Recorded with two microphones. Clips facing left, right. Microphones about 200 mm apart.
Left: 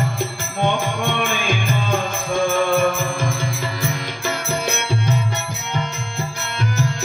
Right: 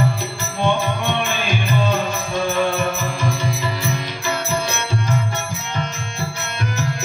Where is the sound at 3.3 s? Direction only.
50° left (ahead or behind).